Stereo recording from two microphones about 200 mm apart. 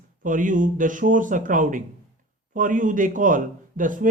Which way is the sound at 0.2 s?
40° right (ahead or behind).